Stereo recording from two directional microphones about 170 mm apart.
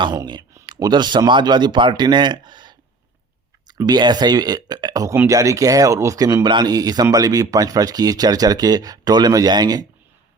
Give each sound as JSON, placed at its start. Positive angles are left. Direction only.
{"t": 0.0, "sound": "speech", "side_deg": -25}